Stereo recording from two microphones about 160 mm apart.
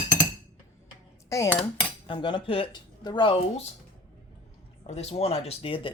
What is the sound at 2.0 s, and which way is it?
Speech, 30° left (ahead or behind).